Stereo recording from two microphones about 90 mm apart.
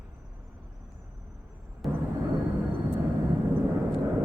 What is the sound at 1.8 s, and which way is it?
Vehicle, centre (ahead or behind).